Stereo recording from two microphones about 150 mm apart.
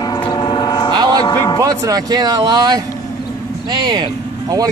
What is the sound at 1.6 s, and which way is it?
Speech, 25° right (ahead or behind).